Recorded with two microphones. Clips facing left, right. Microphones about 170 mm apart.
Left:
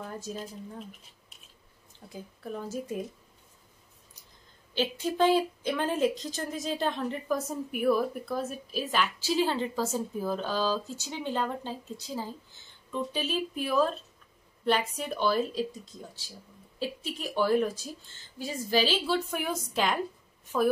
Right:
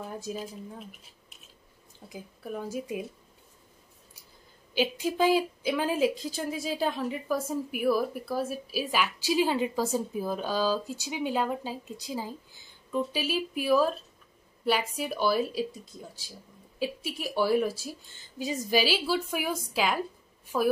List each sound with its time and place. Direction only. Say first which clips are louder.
0.0 s speech: right 2 dB; 10° right (ahead or behind)
2.0 s speech: even; 10° right (ahead or behind)
4.7 s speech: right 1 dB; 10° right (ahead or behind)